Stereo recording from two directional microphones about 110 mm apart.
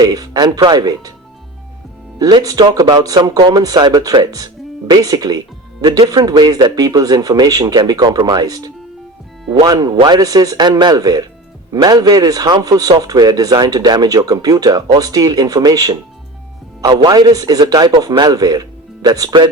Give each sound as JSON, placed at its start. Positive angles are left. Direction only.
{"t": 0.0, "sound": "a man's voice", "side_deg": -35}
{"t": 2.1, "sound": "a man's voice", "side_deg": -35}